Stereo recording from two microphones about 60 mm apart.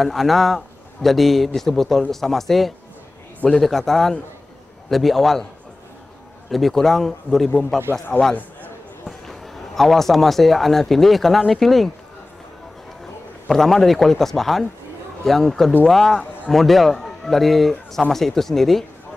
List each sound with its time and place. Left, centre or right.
0.0 s speech: centre
6.5 s speech: centre
9.3 s speech: centre
13.5 s a man's voice: centre